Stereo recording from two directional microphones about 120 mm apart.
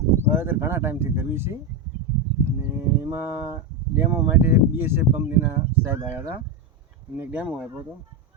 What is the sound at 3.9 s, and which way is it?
Speech, 15° right (ahead or behind).